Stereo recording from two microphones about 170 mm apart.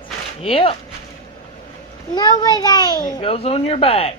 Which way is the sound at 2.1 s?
25° left (ahead or behind).